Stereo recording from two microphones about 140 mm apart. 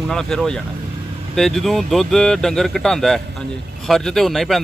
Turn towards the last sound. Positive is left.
turn(degrees=0)  # may be behind; listen again after turning